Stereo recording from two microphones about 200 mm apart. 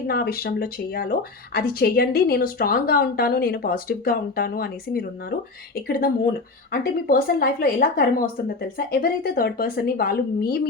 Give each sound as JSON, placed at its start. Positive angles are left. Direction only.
{"t": 0.1, "sound": "speech", "side_deg": 50}
{"t": 6.7, "sound": "speech", "side_deg": 50}